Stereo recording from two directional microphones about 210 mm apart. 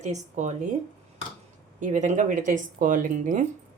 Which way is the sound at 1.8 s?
35° right (ahead or behind).